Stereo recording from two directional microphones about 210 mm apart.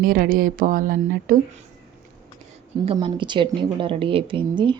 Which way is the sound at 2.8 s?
25° right (ahead or behind).